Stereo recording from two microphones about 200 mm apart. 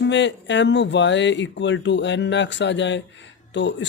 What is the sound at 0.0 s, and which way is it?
Speech, 65° left (ahead or behind).